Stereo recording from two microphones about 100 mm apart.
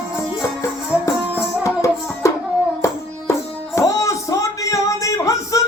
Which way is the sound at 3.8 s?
30° left (ahead or behind).